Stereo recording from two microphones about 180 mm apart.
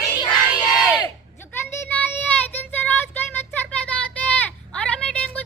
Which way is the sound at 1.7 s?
10° left (ahead or behind).